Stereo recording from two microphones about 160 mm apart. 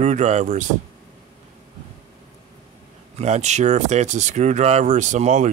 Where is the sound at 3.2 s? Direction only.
45° right (ahead or behind).